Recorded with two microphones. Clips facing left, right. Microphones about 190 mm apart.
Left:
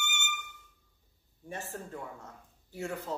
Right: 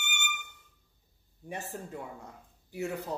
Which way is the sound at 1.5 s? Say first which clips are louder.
Right 1 dB; 20° right (ahead or behind).